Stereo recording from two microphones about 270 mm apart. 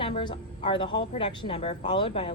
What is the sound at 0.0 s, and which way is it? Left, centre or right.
Speech, centre.